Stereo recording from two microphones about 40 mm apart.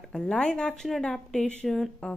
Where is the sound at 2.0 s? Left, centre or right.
Left.